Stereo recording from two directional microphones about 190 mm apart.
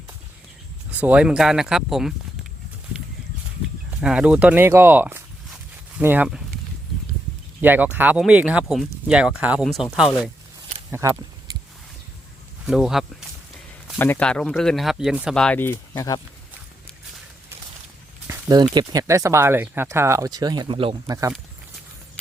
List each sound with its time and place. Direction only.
0.9 s speech: 10° right (ahead or behind)
4.0 s speech: 5° right (ahead or behind)
7.6 s speech: 10° right (ahead or behind)
10.9 s speech: 15° right (ahead or behind)
12.6 s speech: centre (ahead or behind); by 16.2 s 20° left (ahead or behind)
18.3 s speech: 20° right (ahead or behind)